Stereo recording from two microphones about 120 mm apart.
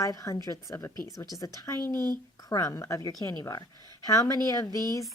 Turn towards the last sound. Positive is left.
turn(degrees=30)  # may be behind; listen again after turning